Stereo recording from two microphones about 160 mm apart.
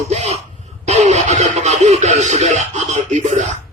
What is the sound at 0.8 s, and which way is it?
Music, 45° right (ahead or behind).